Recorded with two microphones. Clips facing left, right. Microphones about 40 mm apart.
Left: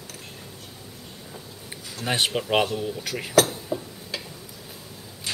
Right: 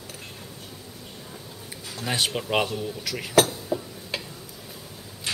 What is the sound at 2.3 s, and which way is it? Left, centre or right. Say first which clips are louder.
Speech: left 2 dB; centre.